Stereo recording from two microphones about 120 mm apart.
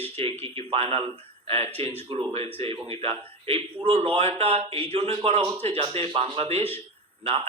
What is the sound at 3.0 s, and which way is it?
A man's voice, 50° right (ahead or behind).